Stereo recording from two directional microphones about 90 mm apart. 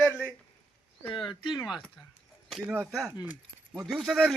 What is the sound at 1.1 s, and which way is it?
Speech, 65° left (ahead or behind).